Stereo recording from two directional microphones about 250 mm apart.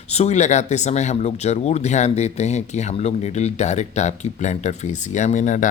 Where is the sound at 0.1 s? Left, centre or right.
Left.